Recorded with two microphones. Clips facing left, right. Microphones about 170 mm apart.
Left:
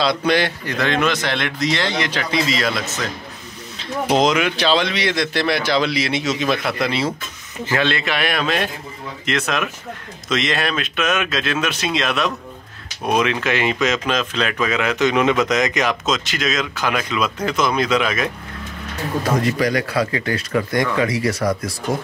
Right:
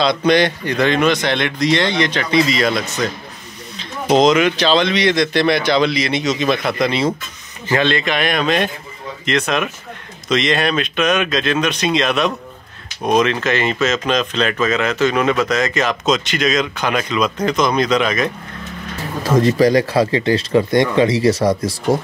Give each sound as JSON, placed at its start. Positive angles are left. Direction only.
{"t": 0.0, "sound": "speech", "side_deg": 5}
{"t": 16.1, "sound": "speech", "side_deg": 0}
{"t": 19.4, "sound": "speech", "side_deg": -30}